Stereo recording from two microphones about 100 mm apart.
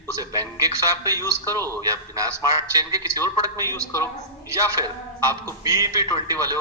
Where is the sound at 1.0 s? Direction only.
35° right (ahead or behind).